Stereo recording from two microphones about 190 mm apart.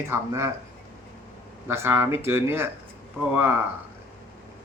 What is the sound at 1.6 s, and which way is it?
A man's voice, 10° right (ahead or behind).